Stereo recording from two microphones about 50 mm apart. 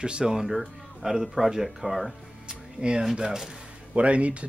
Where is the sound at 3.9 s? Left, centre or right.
Right.